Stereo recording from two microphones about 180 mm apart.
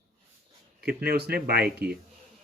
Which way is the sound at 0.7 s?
60° right (ahead or behind).